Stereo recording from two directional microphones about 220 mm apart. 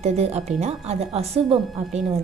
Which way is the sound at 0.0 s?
30° right (ahead or behind).